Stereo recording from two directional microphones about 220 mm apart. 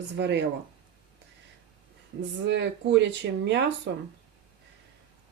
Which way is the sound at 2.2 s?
50° right (ahead or behind).